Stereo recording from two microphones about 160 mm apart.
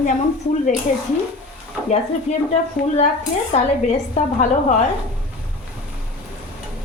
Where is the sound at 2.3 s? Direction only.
45° left (ahead or behind).